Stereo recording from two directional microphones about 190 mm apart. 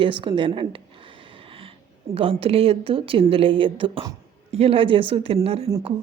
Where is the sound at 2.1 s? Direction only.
30° right (ahead or behind).